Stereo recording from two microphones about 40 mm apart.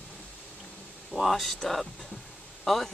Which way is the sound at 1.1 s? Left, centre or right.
Centre.